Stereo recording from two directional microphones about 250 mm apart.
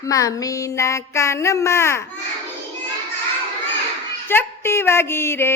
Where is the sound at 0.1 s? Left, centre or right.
Centre.